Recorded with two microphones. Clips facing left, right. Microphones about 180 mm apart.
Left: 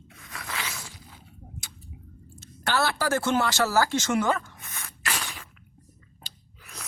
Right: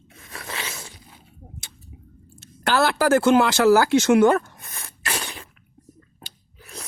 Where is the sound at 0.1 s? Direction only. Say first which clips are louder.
Right 2 dB; 30° right (ahead or behind).